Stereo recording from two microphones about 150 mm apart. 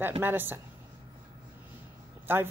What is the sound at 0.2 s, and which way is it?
Speech, 15° right (ahead or behind).